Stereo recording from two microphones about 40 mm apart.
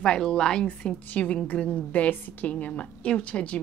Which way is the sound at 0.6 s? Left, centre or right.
Left.